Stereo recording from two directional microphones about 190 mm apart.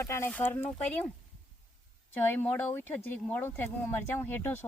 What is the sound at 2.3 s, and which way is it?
Speech, 10° left (ahead or behind).